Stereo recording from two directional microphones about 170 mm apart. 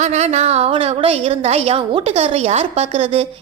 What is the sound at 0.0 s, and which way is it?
A woman's voice, 40° right (ahead or behind).